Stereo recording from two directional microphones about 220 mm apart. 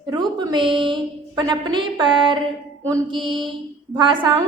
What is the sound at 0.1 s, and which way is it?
A woman's voice, 20° right (ahead or behind).